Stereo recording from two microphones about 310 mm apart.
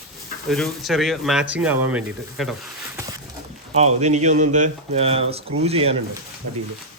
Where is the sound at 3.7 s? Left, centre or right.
Right.